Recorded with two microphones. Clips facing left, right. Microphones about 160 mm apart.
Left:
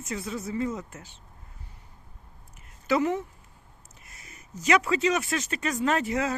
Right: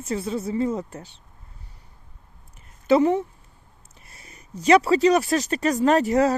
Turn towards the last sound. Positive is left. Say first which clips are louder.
# right 8 dB
turn(degrees=-40)  # may be behind; listen again after turning